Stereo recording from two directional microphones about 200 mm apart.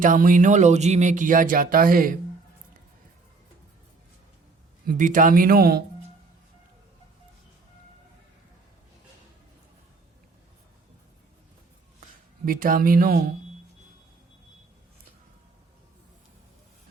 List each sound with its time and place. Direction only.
0.0 s speech: 40° right (ahead or behind)
4.9 s speech: 40° right (ahead or behind)
12.5 s speech: 45° right (ahead or behind)